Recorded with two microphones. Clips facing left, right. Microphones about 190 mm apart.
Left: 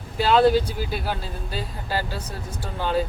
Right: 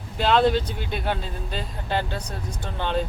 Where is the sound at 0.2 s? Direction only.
5° left (ahead or behind).